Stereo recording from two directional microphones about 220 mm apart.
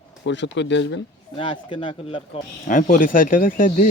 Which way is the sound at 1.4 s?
25° left (ahead or behind).